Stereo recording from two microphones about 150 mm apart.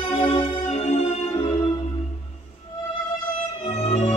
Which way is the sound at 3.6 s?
40° left (ahead or behind).